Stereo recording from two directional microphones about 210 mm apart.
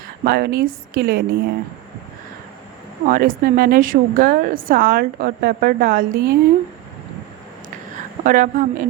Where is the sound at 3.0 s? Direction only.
40° right (ahead or behind).